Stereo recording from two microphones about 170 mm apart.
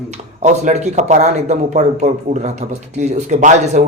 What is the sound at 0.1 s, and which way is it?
Speech, 45° right (ahead or behind).